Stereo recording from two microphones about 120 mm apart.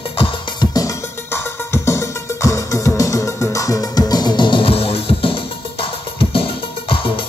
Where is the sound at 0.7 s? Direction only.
25° left (ahead or behind); by 5.8 s 50° left (ahead or behind).